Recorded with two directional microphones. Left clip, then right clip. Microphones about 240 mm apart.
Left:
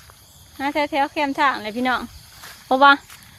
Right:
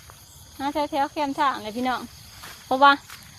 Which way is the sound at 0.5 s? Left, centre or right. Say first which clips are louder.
Left 4 dB; left.